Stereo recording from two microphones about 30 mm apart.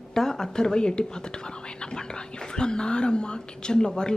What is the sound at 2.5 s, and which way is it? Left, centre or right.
A woman's voice, left.